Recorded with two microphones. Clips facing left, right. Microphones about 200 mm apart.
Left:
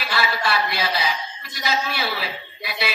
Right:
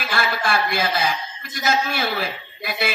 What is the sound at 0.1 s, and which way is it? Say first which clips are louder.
A man's voice: right 1 dB; 50° right (ahead or behind).